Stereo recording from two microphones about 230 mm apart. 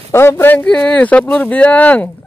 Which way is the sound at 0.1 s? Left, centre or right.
Centre.